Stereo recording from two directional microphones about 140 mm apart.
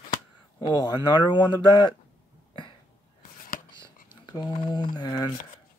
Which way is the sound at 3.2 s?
85° left.